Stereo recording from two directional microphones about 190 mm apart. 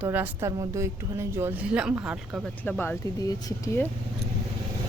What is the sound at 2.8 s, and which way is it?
Speech, 15° left (ahead or behind).